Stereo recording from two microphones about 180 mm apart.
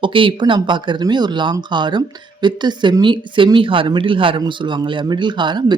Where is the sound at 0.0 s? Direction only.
30° right (ahead or behind).